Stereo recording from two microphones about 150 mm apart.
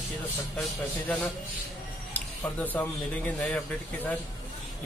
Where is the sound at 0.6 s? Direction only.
5° left (ahead or behind).